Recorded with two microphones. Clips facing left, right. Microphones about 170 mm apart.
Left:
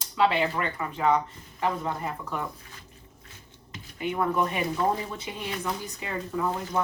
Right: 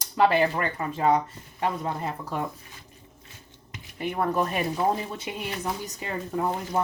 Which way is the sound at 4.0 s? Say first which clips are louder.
Even; 40° right (ahead or behind).